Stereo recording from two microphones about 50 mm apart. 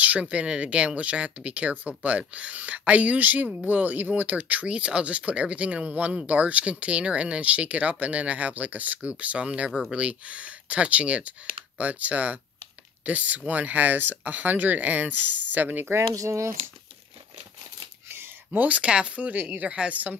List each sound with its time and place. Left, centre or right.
0.0 s speech: right
16.0 s speech: right
18.0 s a sound: right
18.8 s speech: right